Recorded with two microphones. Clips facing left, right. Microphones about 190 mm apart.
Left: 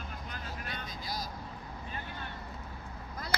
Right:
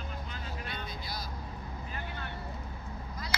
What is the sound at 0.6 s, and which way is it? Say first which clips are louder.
Vehicle: right 1 dB; 40° left (ahead or behind).